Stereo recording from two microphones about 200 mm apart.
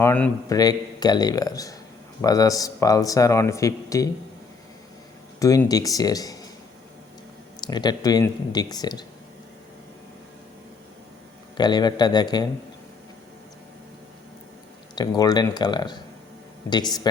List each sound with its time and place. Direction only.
0.0 s speech: 10° left (ahead or behind)
5.4 s speech: 15° left (ahead or behind)
7.6 s speech: 20° left (ahead or behind)
11.5 s speech: 20° left (ahead or behind)
14.9 s speech: 20° left (ahead or behind)